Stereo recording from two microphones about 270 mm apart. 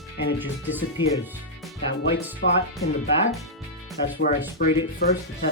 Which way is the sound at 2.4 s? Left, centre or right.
Left.